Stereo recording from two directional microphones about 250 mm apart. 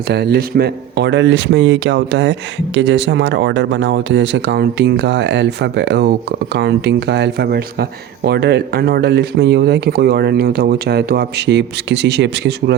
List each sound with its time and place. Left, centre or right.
0.1 s speech: right